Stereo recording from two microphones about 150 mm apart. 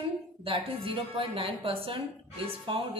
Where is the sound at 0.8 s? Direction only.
35° right (ahead or behind).